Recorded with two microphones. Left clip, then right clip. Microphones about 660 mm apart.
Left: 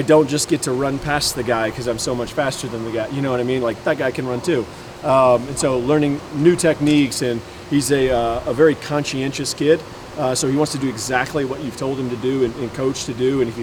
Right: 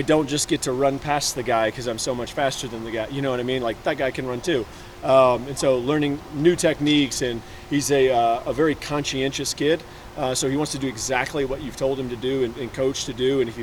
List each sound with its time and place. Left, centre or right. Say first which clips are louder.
0.0 s speech: left 6 dB; right